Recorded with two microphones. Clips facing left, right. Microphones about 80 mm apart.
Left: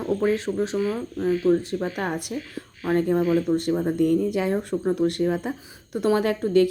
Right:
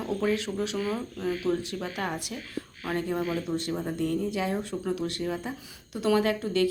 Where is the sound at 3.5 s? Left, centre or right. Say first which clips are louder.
Left 8 dB; centre.